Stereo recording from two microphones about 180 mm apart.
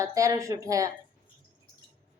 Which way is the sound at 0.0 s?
15° right (ahead or behind).